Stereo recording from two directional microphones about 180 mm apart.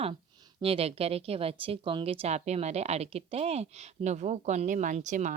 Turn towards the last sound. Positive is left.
turn(degrees=-45)  # may be behind; listen again after turning